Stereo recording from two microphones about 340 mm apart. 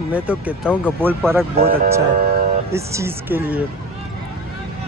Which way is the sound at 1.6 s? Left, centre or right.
Right.